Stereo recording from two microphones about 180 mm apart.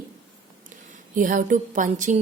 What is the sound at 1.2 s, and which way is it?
A woman's voice, 45° right (ahead or behind).